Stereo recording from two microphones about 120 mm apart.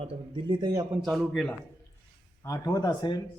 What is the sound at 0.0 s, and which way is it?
Speech, 45° right (ahead or behind).